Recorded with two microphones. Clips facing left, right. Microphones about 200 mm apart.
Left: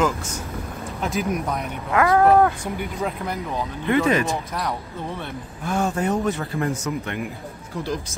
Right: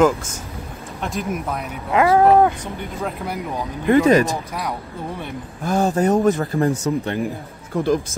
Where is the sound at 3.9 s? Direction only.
40° right (ahead or behind).